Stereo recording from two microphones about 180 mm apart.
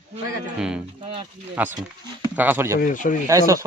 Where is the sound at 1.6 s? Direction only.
10° right (ahead or behind).